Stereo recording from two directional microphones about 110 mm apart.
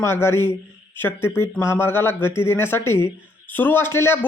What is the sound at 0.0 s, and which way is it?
Speech, 20° left (ahead or behind).